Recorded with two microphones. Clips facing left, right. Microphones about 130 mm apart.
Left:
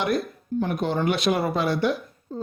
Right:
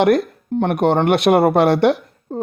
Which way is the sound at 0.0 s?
75° right (ahead or behind).